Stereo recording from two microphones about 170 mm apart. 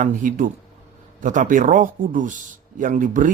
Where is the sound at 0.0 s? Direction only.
50° right (ahead or behind).